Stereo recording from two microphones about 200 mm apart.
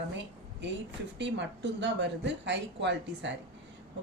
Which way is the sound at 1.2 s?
60° right (ahead or behind).